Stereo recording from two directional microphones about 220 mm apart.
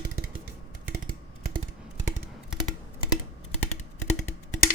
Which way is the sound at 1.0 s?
40° right (ahead or behind).